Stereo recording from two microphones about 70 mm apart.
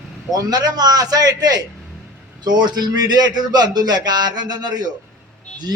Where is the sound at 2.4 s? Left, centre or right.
Right.